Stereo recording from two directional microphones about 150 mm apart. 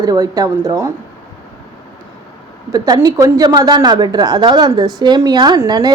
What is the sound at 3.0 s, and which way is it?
A woman's voice, 25° right (ahead or behind).